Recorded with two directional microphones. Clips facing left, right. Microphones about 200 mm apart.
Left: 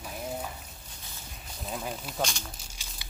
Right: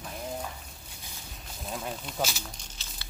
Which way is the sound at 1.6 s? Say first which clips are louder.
Even; centre (ahead or behind).